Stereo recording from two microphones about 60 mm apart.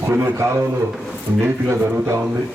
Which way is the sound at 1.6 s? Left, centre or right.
Right.